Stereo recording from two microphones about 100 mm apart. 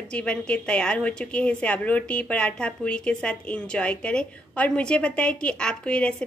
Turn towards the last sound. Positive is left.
turn(degrees=10)  # may be behind; listen again after turning